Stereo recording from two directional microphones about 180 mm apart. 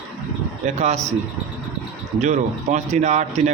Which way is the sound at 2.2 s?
40° right (ahead or behind).